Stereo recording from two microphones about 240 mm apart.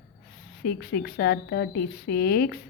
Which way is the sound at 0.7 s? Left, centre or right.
Left.